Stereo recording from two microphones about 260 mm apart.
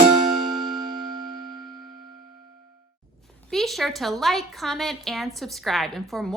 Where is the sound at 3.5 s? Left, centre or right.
Centre.